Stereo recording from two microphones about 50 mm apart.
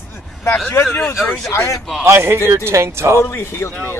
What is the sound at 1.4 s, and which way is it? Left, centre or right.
Speech, left.